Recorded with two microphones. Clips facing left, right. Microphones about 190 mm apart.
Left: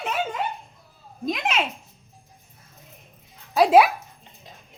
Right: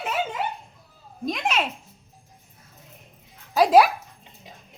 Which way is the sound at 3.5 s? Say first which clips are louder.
Left 1 dB; centre (ahead or behind).